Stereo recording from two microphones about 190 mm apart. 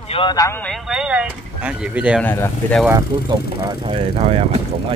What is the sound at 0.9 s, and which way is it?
Speech, 5° right (ahead or behind).